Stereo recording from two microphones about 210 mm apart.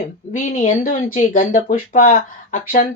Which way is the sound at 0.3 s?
35° left (ahead or behind).